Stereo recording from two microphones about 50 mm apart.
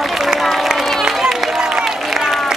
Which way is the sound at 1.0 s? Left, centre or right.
Centre.